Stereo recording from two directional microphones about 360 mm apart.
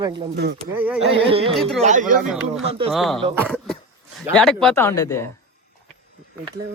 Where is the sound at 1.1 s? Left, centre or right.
Centre.